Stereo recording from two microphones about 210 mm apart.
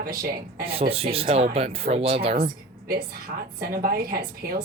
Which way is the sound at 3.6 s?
45° right (ahead or behind).